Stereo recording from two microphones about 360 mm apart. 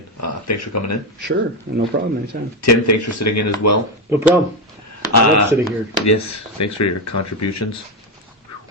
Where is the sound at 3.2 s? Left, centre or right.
Left.